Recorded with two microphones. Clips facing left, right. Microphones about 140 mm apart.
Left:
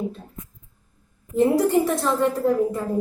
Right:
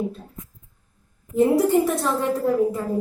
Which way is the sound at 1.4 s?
Centre (ahead or behind).